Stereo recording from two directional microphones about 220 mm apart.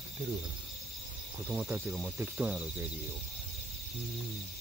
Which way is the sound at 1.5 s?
10° right (ahead or behind).